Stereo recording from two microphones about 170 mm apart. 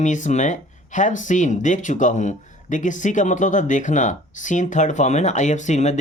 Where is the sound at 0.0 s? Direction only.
45° left (ahead or behind).